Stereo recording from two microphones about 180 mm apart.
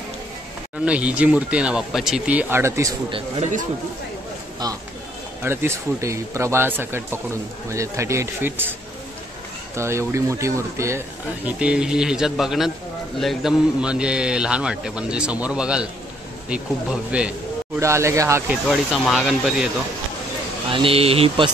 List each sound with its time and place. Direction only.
0.8 s speech: 5° right (ahead or behind)
3.1 s speech: 30° right (ahead or behind)
5.4 s speech: 15° right (ahead or behind)
9.8 s speech: 15° right (ahead or behind)
11.4 s a man's voice: 5° right (ahead or behind)
17.1 s speech: 5° right (ahead or behind)
18.7 s a man's voice: centre (ahead or behind)
20.7 s speech: 30° right (ahead or behind)